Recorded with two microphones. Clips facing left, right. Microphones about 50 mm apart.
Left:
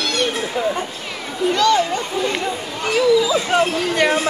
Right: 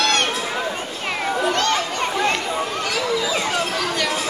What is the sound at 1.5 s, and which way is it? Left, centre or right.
Speech, right.